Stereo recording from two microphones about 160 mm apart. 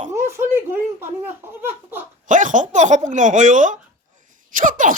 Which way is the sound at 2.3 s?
55° right (ahead or behind).